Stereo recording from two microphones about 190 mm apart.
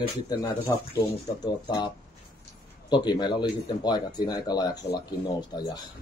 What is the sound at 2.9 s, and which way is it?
Speech, 25° left (ahead or behind).